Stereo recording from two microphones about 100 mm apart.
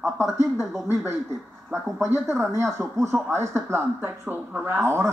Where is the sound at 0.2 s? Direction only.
25° right (ahead or behind).